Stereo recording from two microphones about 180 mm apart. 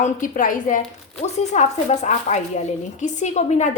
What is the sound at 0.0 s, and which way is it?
A woman's voice, 45° left (ahead or behind).